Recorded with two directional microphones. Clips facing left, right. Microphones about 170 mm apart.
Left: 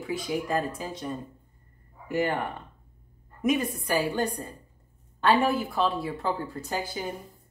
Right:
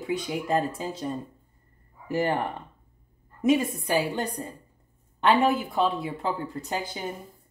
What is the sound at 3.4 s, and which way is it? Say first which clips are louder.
A woman's voice: right 3 dB; 25° right (ahead or behind).